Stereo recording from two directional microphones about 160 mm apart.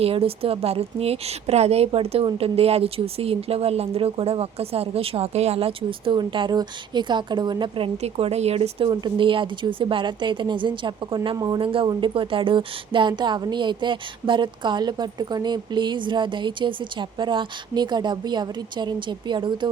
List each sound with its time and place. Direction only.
0.0 s a woman's voice: 35° right (ahead or behind)
8.0 s speech: 40° right (ahead or behind)